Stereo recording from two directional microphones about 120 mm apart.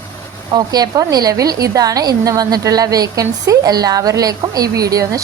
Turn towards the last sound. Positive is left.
turn(degrees=-30)  # may be behind; listen again after turning